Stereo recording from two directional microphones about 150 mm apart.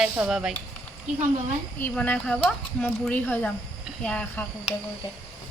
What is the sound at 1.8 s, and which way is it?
Speech, 10° left (ahead or behind).